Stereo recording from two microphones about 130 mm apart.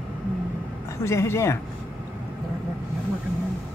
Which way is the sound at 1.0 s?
20° left (ahead or behind).